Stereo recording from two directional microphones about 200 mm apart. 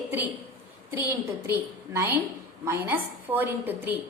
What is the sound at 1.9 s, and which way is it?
A woman's voice, 10° right (ahead or behind).